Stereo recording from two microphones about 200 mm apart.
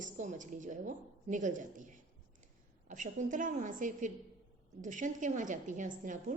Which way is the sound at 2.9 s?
40° right (ahead or behind).